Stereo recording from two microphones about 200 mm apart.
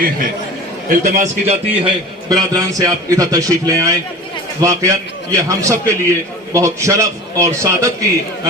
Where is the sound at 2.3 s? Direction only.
20° right (ahead or behind).